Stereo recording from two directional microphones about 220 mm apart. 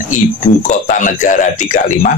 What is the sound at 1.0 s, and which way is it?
A man's voice, 35° left (ahead or behind).